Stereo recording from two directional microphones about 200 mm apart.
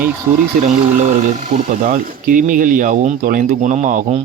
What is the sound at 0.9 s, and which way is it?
Speech, 40° right (ahead or behind).